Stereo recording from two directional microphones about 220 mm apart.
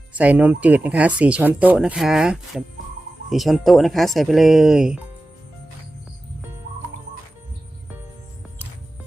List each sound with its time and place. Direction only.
0.1 s speech: 5° right (ahead or behind)